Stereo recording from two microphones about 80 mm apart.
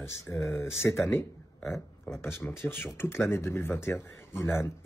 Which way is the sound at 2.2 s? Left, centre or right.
Left.